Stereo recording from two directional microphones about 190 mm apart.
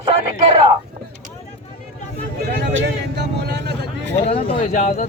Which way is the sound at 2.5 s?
70° right (ahead or behind).